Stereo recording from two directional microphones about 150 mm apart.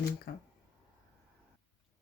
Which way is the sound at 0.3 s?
90° left.